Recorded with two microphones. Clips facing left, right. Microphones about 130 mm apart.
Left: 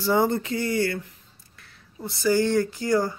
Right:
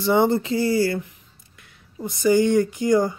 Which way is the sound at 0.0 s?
25° right (ahead or behind).